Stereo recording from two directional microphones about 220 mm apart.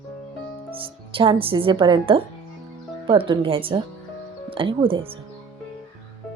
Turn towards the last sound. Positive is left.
turn(degrees=-25)  # may be behind; listen again after turning